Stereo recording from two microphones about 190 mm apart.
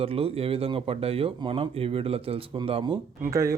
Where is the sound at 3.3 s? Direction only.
15° right (ahead or behind).